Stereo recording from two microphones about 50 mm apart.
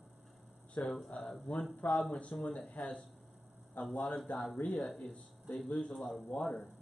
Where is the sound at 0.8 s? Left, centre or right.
Left.